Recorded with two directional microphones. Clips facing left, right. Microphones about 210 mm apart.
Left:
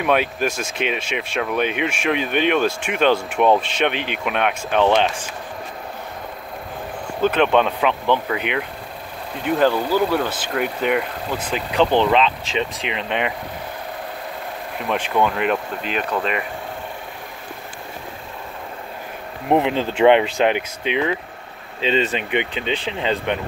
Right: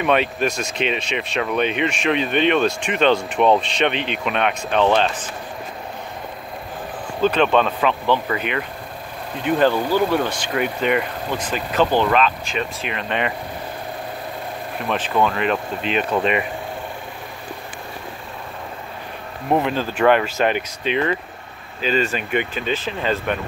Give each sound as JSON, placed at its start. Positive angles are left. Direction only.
{"t": 0.0, "sound": "speech", "side_deg": 5}
{"t": 7.2, "sound": "speech", "side_deg": 10}
{"t": 9.7, "sound": "speech", "side_deg": -15}
{"t": 9.9, "sound": "speech", "side_deg": 5}
{"t": 11.9, "sound": "speech", "side_deg": 20}
{"t": 14.9, "sound": "speech", "side_deg": 10}
{"t": 16.1, "sound": "speech", "side_deg": -5}
{"t": 19.5, "sound": "speech", "side_deg": 20}